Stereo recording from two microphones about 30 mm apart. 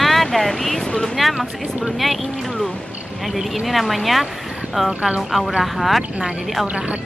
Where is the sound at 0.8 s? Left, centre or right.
Left.